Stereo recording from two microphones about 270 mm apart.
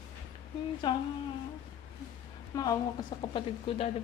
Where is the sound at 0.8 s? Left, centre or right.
Centre.